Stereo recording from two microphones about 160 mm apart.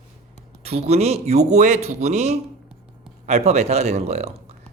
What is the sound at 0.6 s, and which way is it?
A man's voice, 40° right (ahead or behind).